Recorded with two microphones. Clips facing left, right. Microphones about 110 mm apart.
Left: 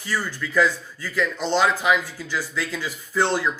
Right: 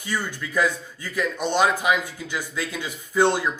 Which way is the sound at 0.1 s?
20° right (ahead or behind).